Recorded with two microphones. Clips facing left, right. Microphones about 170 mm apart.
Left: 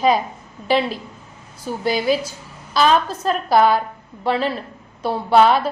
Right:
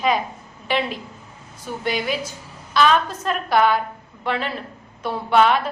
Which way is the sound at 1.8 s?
35° left (ahead or behind).